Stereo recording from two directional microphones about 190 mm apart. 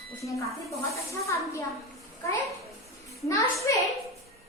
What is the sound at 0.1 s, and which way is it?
Speech, 15° left (ahead or behind).